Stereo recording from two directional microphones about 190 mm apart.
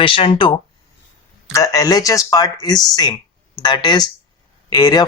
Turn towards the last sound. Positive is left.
turn(degrees=20)  # may be behind; listen again after turning